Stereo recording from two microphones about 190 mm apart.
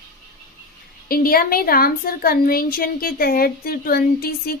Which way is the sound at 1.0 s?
50° left (ahead or behind).